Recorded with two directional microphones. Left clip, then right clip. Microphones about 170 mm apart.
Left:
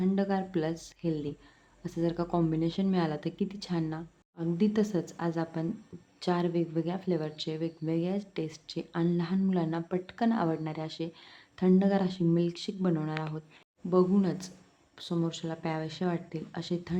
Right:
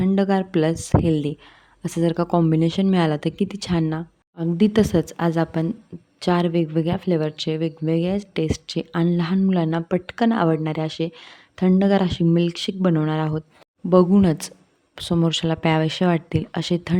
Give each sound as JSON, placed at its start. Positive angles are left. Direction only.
{"t": 0.0, "sound": "a woman's voice", "side_deg": -40}